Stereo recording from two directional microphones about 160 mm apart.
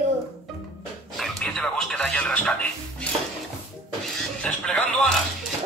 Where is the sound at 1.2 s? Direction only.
5° left (ahead or behind).